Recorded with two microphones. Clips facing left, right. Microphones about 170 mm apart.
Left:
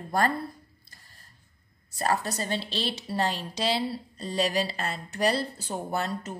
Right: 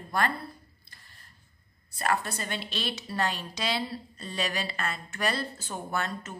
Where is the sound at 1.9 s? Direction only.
40° left (ahead or behind).